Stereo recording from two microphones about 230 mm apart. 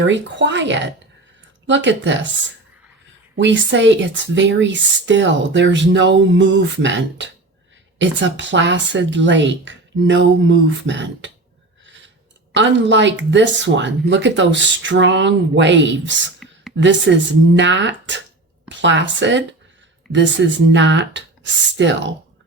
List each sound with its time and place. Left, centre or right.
0.0 s speech: right
3.3 s speech: right
11.9 s a sound: right
12.5 s speech: right